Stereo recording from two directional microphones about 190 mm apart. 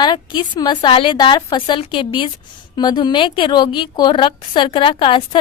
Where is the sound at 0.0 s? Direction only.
25° left (ahead or behind).